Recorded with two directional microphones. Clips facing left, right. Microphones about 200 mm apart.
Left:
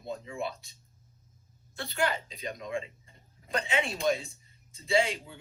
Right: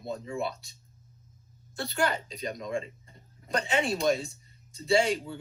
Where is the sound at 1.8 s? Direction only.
40° right (ahead or behind).